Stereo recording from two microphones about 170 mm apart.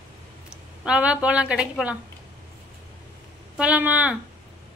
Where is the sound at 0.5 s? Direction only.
5° right (ahead or behind).